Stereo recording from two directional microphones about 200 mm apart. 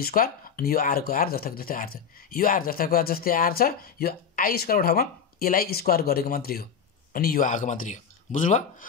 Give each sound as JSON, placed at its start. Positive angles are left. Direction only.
{"t": 0.0, "sound": "speech", "side_deg": 45}